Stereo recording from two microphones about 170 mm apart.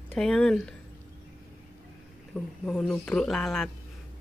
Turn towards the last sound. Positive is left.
turn(degrees=0)  # may be behind; listen again after turning